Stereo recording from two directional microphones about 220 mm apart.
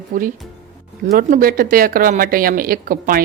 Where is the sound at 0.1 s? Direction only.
35° right (ahead or behind).